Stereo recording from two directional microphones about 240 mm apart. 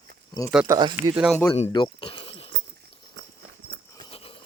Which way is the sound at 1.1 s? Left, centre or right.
Centre.